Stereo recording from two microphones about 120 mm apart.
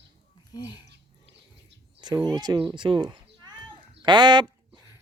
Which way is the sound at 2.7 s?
40° right (ahead or behind).